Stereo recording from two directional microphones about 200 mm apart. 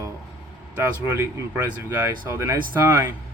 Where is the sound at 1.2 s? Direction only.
10° right (ahead or behind).